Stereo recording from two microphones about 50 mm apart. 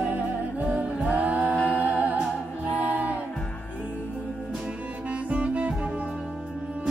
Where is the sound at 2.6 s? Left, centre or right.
Right.